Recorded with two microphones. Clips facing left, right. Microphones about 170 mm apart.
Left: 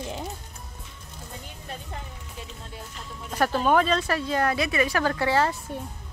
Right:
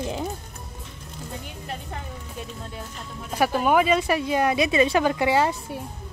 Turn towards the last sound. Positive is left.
turn(degrees=-15)  # may be behind; listen again after turning